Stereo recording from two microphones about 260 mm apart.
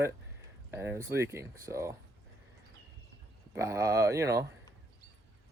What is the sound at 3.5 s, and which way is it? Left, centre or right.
Speech, centre.